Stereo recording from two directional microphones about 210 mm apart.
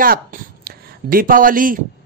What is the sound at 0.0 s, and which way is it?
A man's voice, 45° right (ahead or behind).